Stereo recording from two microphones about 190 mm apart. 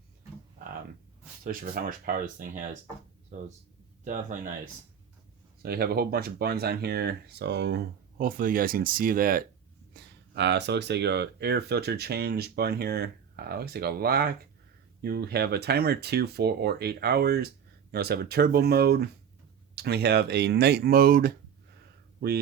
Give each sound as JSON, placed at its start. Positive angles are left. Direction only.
{"t": 1.5, "sound": "speech", "side_deg": -50}
{"t": 5.6, "sound": "speech", "side_deg": -55}
{"t": 9.9, "sound": "speech", "side_deg": -60}